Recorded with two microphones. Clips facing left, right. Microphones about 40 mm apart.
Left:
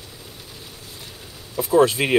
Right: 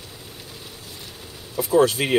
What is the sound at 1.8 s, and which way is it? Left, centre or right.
Speech, left.